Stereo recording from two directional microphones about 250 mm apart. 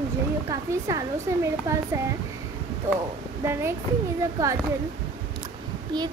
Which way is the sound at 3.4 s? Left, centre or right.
Centre.